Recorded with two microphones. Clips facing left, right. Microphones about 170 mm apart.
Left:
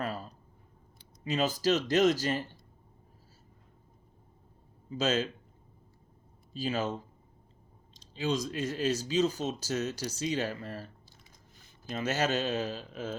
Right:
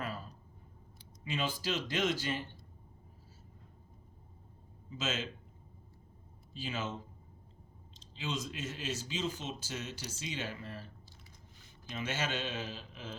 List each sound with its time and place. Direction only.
0.0 s a sound: 40° left (ahead or behind)
1.2 s speech: 40° left (ahead or behind)
4.9 s speech: 40° left (ahead or behind)
6.5 s speech: 40° left (ahead or behind)
11.9 s speech: 40° left (ahead or behind)